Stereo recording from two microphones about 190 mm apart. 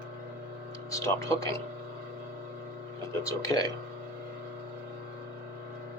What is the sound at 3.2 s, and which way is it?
Speech, 20° left (ahead or behind).